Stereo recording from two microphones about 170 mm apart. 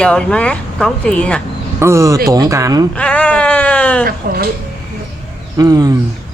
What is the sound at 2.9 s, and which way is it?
Speech, 5° left (ahead or behind).